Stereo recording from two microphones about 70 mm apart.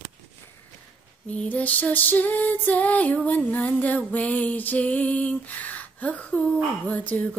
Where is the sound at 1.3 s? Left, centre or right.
Left.